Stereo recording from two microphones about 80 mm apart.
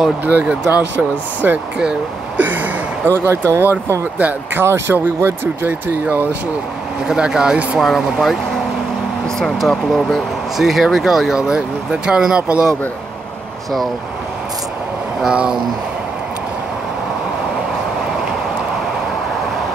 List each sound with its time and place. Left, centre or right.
0.2 s speech: right
1.8 s speech: centre
2.4 s a sound: right
3.3 s speech: right
4.2 s speech: right
4.6 s speech: right
7.1 s speech: centre
7.8 s speech: centre
9.4 s speech: centre
15.2 s speech: centre